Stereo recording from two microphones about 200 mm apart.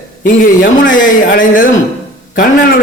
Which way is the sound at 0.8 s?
45° left (ahead or behind).